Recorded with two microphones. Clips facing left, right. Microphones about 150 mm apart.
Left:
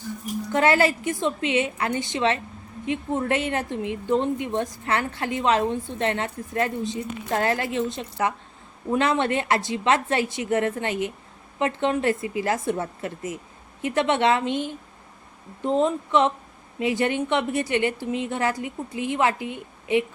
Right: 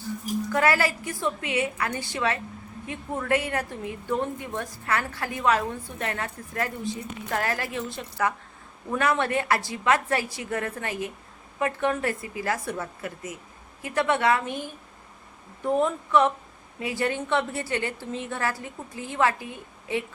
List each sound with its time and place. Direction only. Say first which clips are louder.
0.5 s a woman's voice: left 4 dB; 25° left (ahead or behind)